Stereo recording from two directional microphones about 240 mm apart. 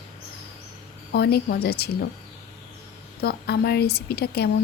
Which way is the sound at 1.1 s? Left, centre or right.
Left.